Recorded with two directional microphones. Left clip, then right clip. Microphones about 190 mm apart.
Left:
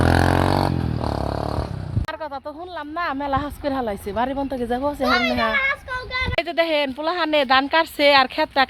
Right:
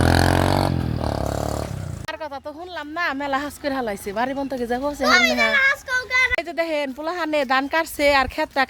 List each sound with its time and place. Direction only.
0.0 s vehicle: 20° right (ahead or behind)
2.7 s a woman's voice: 5° right (ahead or behind)
5.0 s children playing: 15° right (ahead or behind)
6.3 s a woman's voice: 5° right (ahead or behind)